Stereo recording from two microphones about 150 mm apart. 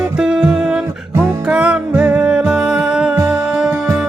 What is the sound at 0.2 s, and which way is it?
Music, 5° right (ahead or behind).